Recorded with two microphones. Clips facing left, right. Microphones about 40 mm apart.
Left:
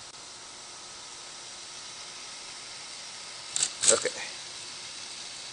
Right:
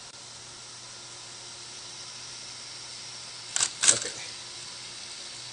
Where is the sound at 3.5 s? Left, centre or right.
Right.